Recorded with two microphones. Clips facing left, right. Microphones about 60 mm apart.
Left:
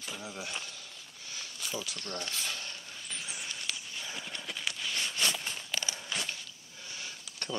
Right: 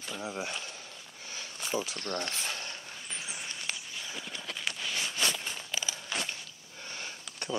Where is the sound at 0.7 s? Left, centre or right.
Right.